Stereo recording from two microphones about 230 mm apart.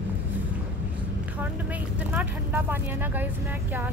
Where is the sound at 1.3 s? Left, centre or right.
Centre.